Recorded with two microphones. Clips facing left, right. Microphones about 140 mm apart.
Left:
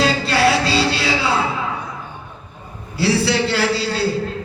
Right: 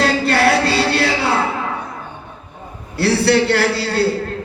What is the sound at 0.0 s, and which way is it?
Chant, 55° right (ahead or behind).